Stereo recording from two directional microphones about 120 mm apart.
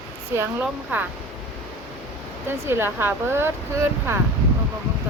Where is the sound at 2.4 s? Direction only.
20° right (ahead or behind).